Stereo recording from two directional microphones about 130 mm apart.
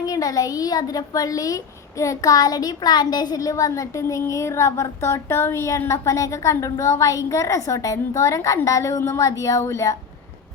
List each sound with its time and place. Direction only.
0.0 s speech: 30° left (ahead or behind)